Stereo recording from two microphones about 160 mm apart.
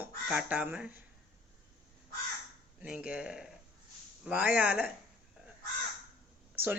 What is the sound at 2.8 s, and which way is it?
Speech, 10° right (ahead or behind).